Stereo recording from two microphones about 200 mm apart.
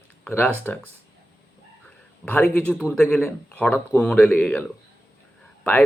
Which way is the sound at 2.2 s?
10° left (ahead or behind).